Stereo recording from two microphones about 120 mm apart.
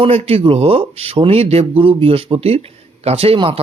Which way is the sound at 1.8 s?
50° right (ahead or behind).